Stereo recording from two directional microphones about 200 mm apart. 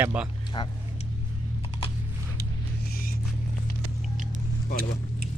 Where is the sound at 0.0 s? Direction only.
5° right (ahead or behind).